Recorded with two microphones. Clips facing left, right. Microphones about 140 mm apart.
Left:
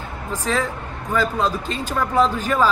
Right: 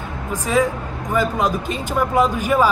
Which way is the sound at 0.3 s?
15° right (ahead or behind).